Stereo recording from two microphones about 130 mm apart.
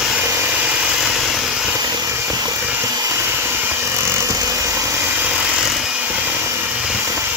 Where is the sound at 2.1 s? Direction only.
25° right (ahead or behind); by 6.3 s 10° right (ahead or behind).